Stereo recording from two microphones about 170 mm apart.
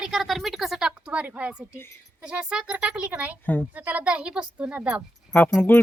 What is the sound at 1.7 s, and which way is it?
Speech, 15° left (ahead or behind).